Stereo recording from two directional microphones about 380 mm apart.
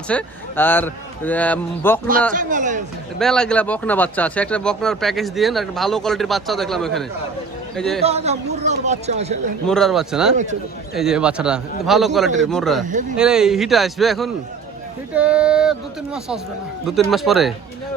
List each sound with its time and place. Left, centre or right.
0.1 s speech: centre
2.3 s speech: centre
3.2 s speech: centre
8.0 s speech: centre
9.6 s speech: centre
12.8 s speech: centre
13.1 s speech: centre
16.8 s speech: centre